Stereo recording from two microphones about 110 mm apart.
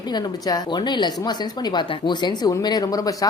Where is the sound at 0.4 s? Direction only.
40° left (ahead or behind).